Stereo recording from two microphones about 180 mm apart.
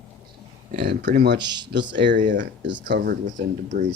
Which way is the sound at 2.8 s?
65° right (ahead or behind).